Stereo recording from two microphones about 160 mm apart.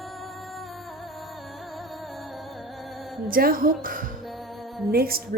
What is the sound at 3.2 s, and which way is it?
A woman's voice, 65° right (ahead or behind).